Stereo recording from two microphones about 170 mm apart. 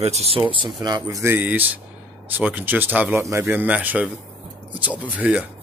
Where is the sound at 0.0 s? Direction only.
35° right (ahead or behind); by 5.5 s 10° right (ahead or behind).